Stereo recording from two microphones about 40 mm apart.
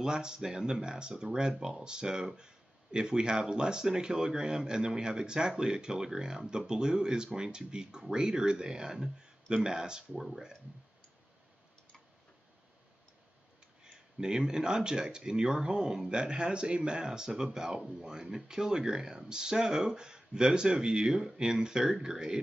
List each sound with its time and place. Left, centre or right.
0.0 s speech: centre
10.1 s speech: centre
14.2 s speech: centre